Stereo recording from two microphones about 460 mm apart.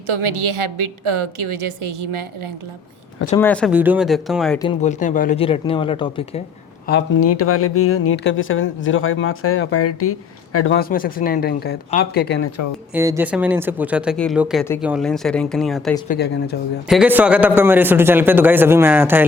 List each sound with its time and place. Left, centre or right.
0.1 s a woman's voice: right
3.3 s speech: centre
6.8 s speech: left
12.9 s speech: centre
16.0 s speech: left
16.9 s speech: centre